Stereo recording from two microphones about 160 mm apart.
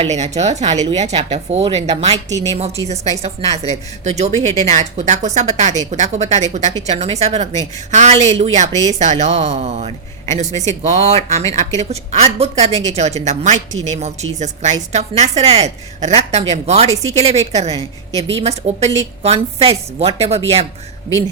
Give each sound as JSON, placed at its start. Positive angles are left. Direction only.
{"t": 0.0, "sound": "a woman's voice", "side_deg": -45}